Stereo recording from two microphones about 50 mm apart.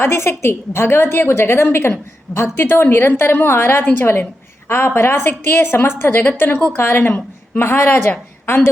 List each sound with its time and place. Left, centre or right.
0.0 s a woman's voice: left
2.6 s a woman's voice: left
8.5 s a woman's voice: left